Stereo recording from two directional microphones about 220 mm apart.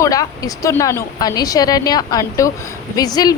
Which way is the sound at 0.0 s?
15° left (ahead or behind).